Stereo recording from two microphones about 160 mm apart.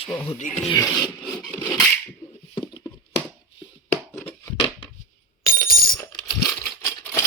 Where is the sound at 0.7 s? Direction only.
25° left (ahead or behind).